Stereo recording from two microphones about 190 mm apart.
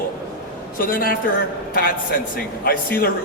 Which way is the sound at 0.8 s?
50° left (ahead or behind).